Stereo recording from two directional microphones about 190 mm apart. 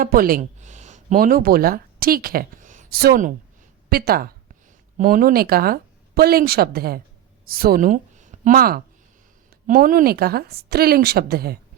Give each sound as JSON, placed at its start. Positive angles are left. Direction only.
{"t": 0.0, "sound": "speech", "side_deg": -50}